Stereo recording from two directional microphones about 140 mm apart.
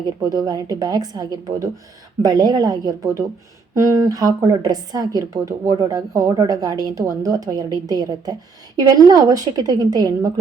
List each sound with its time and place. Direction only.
0.2 s a woman's voice: 25° right (ahead or behind)